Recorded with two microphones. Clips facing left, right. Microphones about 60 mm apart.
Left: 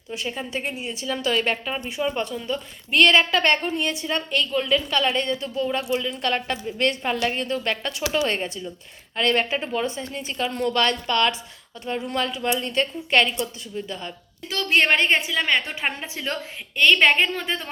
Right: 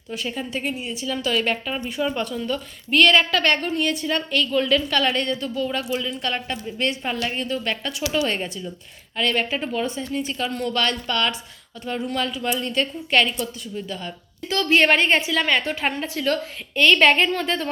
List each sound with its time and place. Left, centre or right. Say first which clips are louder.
0.3 s a woman's voice: right 2 dB; left
1.7 s a woman's voice: right 1 dB; centre
4.5 s speech: right 2 dB; centre
4.9 s a woman's voice: right 1 dB; left
5.9 s a woman's voice: left 2 dB; left
14.5 s a woman's voice: right 2 dB; centre
15.9 s a woman's voice: right 5 dB; centre
16.8 s a woman's voice: right 1 dB; centre